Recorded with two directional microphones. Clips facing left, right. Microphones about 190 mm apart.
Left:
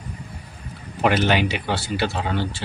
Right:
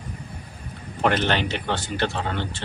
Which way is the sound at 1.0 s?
10° left (ahead or behind).